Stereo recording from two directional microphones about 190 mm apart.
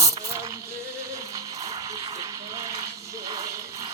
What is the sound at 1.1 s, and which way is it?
Music, 15° right (ahead or behind).